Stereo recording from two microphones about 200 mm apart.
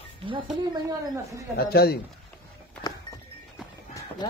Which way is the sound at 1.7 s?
50° left (ahead or behind).